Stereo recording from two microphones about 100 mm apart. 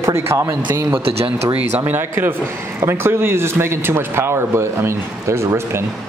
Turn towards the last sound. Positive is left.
turn(degrees=-25)  # may be behind; listen again after turning